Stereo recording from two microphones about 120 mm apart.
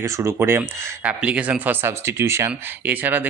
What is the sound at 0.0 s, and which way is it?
Speech, 25° right (ahead or behind).